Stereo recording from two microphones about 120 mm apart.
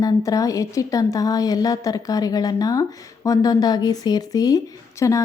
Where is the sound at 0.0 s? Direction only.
30° left (ahead or behind).